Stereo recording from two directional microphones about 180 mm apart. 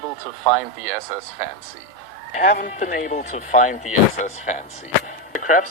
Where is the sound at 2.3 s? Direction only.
45° left (ahead or behind).